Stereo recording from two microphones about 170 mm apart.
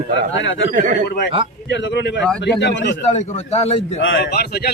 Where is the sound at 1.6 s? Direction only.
90° left.